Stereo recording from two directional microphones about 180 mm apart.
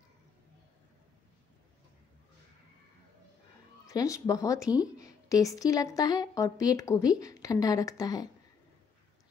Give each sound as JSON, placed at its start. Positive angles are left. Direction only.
{"t": 3.8, "sound": "a woman's voice", "side_deg": 20}